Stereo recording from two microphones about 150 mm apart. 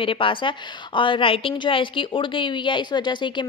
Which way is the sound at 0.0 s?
35° left (ahead or behind).